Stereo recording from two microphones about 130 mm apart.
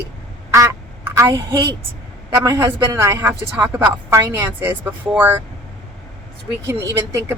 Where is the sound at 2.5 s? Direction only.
25° right (ahead or behind).